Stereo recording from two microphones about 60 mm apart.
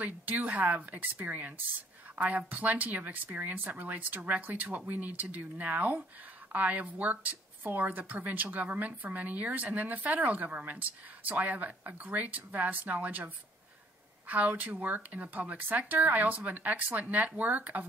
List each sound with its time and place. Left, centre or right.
0.0 s speech: right